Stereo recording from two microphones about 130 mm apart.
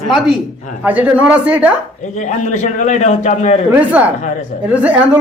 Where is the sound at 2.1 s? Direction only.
70° left (ahead or behind).